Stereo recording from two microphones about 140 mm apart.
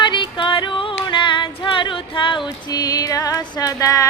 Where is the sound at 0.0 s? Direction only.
35° left (ahead or behind).